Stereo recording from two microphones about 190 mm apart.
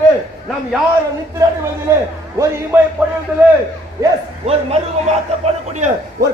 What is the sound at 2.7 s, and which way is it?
Music, 10° right (ahead or behind).